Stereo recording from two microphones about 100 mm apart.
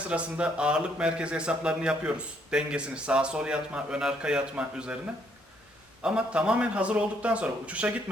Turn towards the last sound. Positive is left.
turn(degrees=-15)  # may be behind; listen again after turning